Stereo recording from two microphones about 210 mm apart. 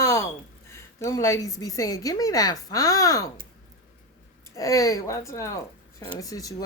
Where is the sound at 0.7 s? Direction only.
15° left (ahead or behind).